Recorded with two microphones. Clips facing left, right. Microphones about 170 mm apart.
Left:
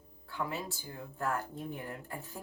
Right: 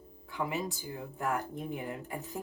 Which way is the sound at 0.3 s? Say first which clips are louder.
Right 3 dB; 15° right (ahead or behind).